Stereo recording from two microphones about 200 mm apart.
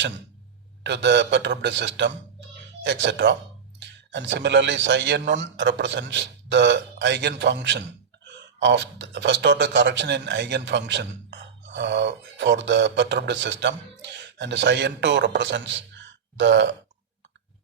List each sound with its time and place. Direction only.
0.9 s a man's voice: 60° right (ahead or behind)